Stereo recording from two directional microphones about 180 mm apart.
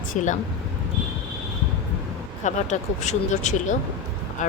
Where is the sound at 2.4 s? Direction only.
40° left (ahead or behind).